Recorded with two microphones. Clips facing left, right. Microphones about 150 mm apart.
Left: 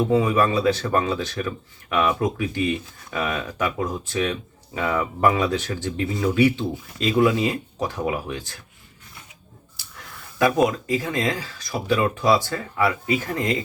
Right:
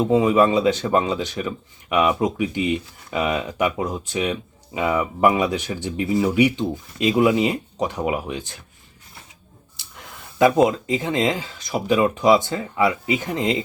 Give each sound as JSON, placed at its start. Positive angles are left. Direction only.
{"t": 0.0, "sound": "speech", "side_deg": -20}
{"t": 9.7, "sound": "speech", "side_deg": -20}